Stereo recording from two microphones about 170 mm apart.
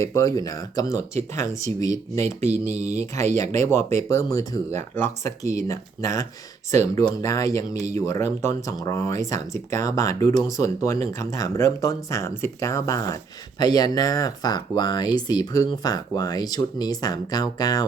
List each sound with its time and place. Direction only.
0.0 s speech: 20° left (ahead or behind)
2.7 s speech: 40° right (ahead or behind)
3.5 s speech: 15° left (ahead or behind)